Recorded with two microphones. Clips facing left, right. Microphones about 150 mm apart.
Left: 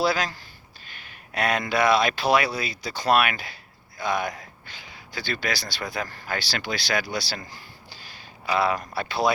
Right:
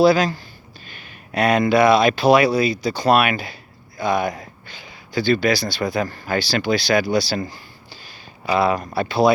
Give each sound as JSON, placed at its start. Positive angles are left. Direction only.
{"t": 0.0, "sound": "speech", "side_deg": -15}
{"t": 8.5, "sound": "speech", "side_deg": -10}